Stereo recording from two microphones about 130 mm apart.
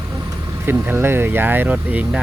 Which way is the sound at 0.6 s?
15° right (ahead or behind).